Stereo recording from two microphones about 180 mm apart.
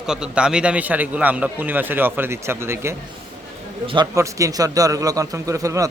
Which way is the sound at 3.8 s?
25° right (ahead or behind).